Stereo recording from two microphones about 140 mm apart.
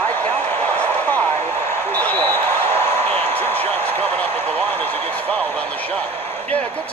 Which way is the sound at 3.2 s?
15° left (ahead or behind).